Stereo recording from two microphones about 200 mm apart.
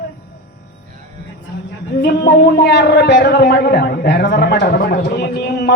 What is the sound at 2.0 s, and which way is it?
Speech, 55° left (ahead or behind).